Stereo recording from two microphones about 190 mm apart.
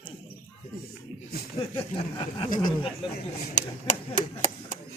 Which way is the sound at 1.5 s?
30° left (ahead or behind).